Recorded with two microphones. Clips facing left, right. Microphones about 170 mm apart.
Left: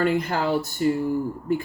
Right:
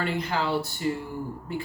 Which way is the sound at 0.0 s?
45° left (ahead or behind).